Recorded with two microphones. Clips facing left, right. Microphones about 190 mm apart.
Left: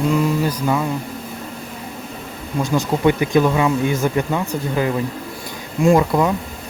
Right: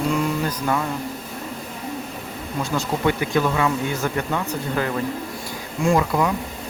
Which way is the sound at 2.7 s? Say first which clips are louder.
Left 5 dB; 15° left (ahead or behind).